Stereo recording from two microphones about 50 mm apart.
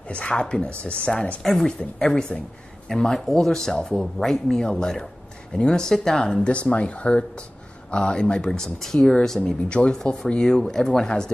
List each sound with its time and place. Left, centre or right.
0.1 s speech: centre